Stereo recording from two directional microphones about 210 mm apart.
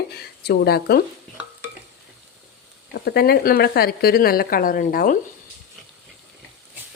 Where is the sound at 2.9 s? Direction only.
50° left (ahead or behind).